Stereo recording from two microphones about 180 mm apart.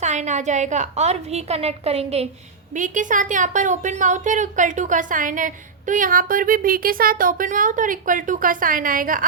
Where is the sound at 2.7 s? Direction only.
45° right (ahead or behind).